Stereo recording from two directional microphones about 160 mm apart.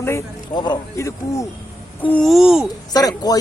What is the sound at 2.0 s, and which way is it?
Speech, 5° left (ahead or behind).